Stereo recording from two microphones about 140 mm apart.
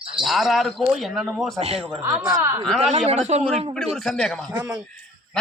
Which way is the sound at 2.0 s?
20° right (ahead or behind).